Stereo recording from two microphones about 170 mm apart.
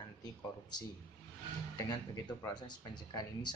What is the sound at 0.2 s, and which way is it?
Speech, 25° left (ahead or behind).